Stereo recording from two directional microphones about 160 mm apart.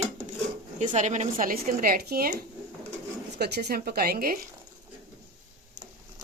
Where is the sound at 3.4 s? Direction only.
90° right; by 4.4 s 65° right (ahead or behind).